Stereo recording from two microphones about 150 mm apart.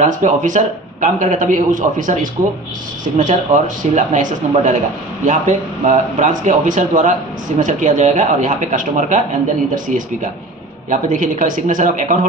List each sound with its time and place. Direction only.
0.0 s a man's voice: 55° right (ahead or behind)
3.2 s a man's voice: 60° right (ahead or behind)
10.9 s a man's voice: 60° right (ahead or behind)